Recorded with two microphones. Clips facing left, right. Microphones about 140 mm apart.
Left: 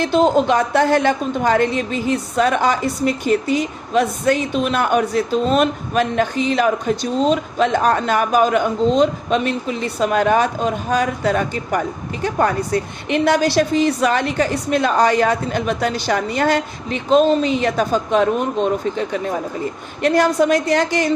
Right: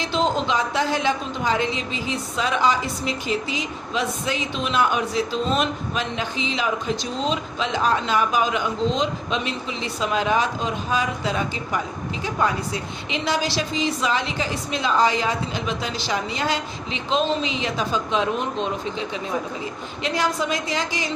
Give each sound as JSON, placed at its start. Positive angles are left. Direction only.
{"t": 0.0, "sound": "a woman's voice", "side_deg": 55}